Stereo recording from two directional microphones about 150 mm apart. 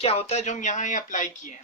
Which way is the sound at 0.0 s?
45° left (ahead or behind).